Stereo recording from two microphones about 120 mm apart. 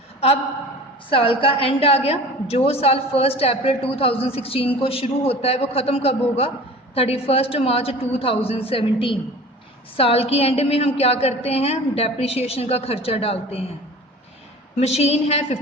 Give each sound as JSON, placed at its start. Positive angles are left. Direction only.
{"t": 1.1, "sound": "a woman's voice", "side_deg": 50}
{"t": 10.0, "sound": "a woman's voice", "side_deg": 55}
{"t": 14.8, "sound": "a woman's voice", "side_deg": 65}